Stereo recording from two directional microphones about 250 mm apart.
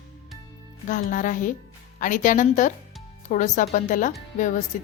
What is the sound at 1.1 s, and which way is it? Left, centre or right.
A woman's voice, left.